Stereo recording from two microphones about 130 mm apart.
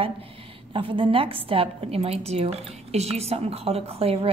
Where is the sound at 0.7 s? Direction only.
40° right (ahead or behind).